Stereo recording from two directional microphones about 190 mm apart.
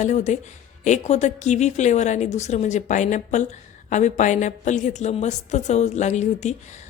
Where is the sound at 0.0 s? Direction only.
40° left (ahead or behind).